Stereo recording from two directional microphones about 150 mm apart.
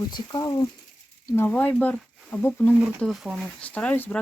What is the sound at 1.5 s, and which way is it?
Speech, 10° left (ahead or behind).